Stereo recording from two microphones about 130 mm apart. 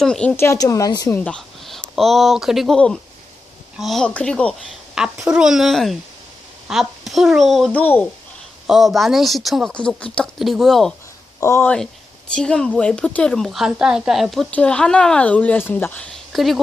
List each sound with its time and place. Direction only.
0.0 s speech: 5° left (ahead or behind)
0.3 s speech: 20° left (ahead or behind)
1.1 s speech: 10° left (ahead or behind)
4.9 s a woman's voice: 5° right (ahead or behind)
7.7 s a woman's voice: 15° left (ahead or behind)
8.6 s speech: centre (ahead or behind)
11.3 s speech: 20° left (ahead or behind)
12.3 s a woman's voice: 5° left (ahead or behind)
16.3 s speech: centre (ahead or behind)